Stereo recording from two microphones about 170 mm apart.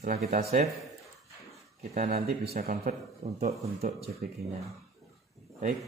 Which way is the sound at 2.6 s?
55° right (ahead or behind).